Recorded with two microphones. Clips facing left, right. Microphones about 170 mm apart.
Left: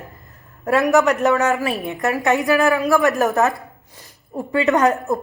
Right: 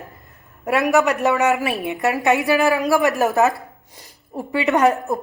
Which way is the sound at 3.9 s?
15° right (ahead or behind).